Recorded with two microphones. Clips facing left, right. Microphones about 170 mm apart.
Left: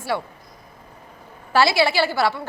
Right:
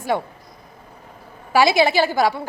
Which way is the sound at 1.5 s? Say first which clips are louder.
Right 2 dB; 15° right (ahead or behind).